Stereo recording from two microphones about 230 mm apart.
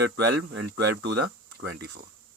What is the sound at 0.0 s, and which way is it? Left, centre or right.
Speech, right.